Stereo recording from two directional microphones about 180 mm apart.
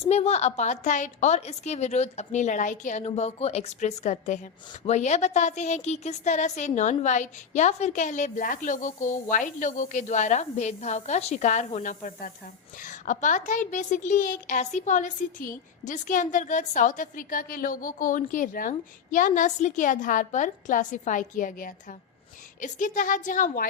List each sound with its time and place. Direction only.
0.0 s a woman's voice: 35° left (ahead or behind)